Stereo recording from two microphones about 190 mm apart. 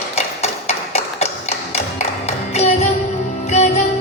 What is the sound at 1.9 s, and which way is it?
Music, 35° left (ahead or behind).